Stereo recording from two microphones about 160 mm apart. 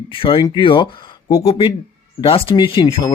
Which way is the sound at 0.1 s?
35° left (ahead or behind).